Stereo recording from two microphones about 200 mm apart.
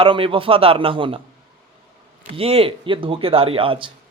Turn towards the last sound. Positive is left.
turn(degrees=-25)  # may be behind; listen again after turning